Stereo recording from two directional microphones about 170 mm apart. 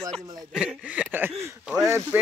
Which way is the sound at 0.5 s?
5° right (ahead or behind).